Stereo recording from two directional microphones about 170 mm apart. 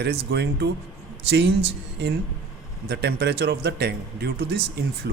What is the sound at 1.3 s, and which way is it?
Speech, 85° right.